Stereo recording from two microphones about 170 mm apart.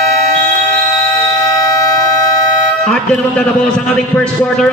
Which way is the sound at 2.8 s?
5° left (ahead or behind).